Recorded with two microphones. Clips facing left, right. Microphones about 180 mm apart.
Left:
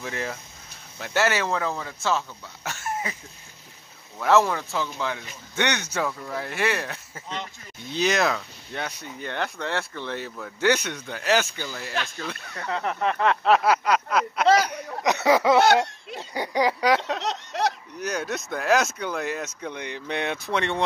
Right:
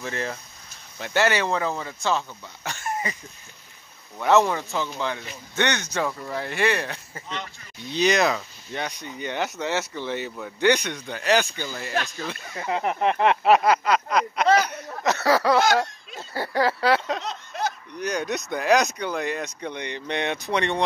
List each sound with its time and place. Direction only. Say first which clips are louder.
0.0 s speech: right 1 dB; 5° left (ahead or behind)
4.2 s speech: right 1 dB; centre (ahead or behind)
12.6 s speech: right 3 dB; 15° right (ahead or behind)
13.5 s a sound: right 1 dB; 5° left (ahead or behind)
17.2 s a sound: left 3 dB; 75° left (ahead or behind)
17.9 s speech: right 2 dB; 5° left (ahead or behind)